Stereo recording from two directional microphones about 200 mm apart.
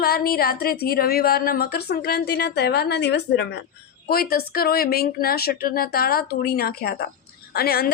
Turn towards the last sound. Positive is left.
turn(degrees=50)  # may be behind; listen again after turning